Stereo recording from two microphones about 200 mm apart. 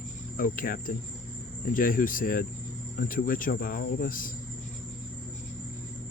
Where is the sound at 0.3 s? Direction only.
45° left (ahead or behind).